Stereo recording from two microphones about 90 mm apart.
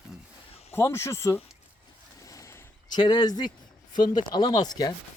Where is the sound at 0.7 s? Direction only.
30° left (ahead or behind).